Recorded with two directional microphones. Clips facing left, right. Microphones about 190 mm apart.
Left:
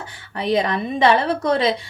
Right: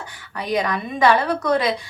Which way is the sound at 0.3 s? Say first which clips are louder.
Left 3 dB; 25° left (ahead or behind).